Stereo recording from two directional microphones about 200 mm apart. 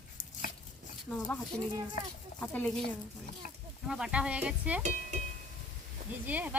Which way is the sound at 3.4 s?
40° left (ahead or behind).